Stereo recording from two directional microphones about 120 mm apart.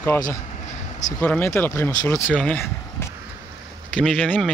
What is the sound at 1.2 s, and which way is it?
Speech, 15° left (ahead or behind).